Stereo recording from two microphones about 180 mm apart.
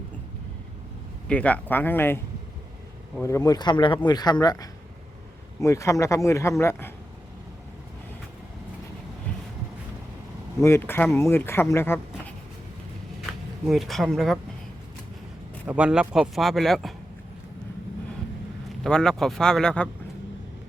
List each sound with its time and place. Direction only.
1.3 s speech: 5° left (ahead or behind)
10.6 s speech: 15° left (ahead or behind)
13.7 s a man's voice: centre (ahead or behind)
15.6 s a man's voice: 5° right (ahead or behind)
18.8 s a man's voice: 5° left (ahead or behind)